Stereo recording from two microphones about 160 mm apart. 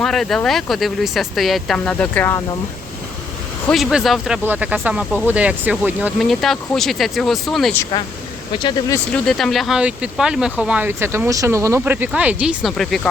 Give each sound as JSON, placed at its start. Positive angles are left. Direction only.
{"t": 0.0, "sound": "speech", "side_deg": 0}
{"t": 3.7, "sound": "speech", "side_deg": 0}
{"t": 8.5, "sound": "speech", "side_deg": 30}
{"t": 9.1, "sound": "speech", "side_deg": 0}